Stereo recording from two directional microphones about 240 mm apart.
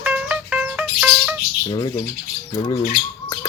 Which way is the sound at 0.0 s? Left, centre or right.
Centre.